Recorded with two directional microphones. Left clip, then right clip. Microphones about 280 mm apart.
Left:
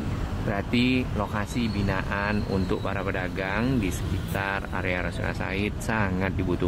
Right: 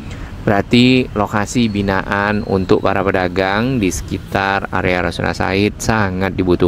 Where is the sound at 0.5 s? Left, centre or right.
Right.